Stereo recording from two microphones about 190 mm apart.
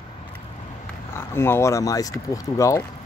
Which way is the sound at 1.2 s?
10° left (ahead or behind).